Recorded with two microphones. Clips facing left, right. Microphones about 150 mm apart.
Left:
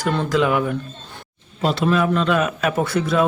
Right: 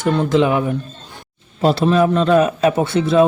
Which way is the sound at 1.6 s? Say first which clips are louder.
Right 4 dB; 35° right (ahead or behind).